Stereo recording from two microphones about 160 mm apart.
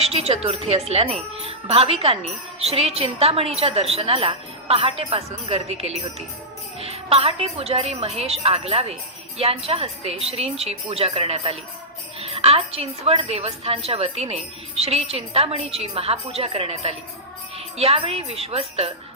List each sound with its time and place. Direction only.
0.0 s speech: 40° right (ahead or behind)